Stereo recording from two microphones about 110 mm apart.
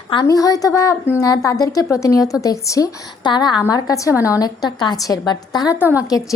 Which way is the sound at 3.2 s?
45° left (ahead or behind).